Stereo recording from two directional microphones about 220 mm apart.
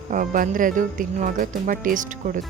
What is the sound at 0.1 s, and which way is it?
Speech, 35° right (ahead or behind).